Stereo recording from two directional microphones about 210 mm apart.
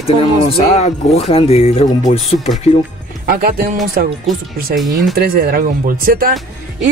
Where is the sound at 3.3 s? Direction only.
45° right (ahead or behind).